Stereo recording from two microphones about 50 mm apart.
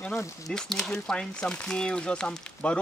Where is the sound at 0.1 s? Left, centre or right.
Centre.